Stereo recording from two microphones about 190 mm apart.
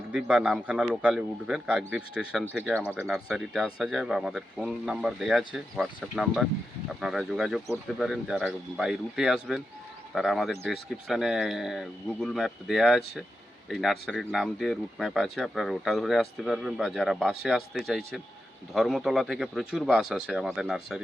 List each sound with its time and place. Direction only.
0.1 s speech: 5° right (ahead or behind)